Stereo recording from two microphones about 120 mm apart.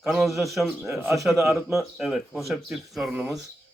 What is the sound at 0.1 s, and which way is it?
A man's voice, centre (ahead or behind).